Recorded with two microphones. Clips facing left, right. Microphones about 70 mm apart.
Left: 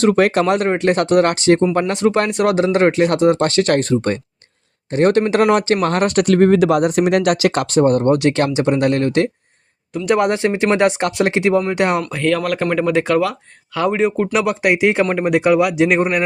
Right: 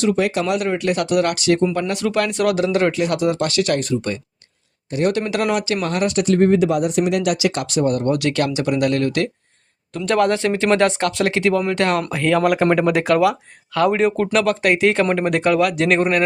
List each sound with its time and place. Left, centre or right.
0.0 s speech: left
10.1 s speech: centre
12.0 s speech: centre